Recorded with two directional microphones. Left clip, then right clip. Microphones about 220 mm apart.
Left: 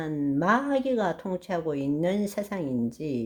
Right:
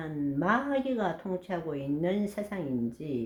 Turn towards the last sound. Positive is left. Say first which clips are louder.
# left 4 dB
turn(degrees=45)  # may be behind; listen again after turning